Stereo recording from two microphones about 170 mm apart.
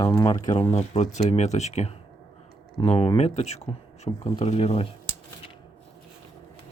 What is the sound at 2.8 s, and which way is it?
Speech, 25° left (ahead or behind).